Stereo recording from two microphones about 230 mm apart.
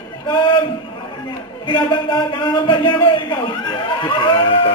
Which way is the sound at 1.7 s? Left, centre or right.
Centre.